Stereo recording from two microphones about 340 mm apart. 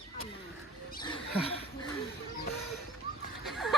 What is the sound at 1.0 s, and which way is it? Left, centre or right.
Rodents, centre.